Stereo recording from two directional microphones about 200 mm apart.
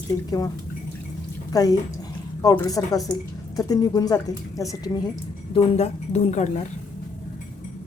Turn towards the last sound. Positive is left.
turn(degrees=35)  # may be behind; listen again after turning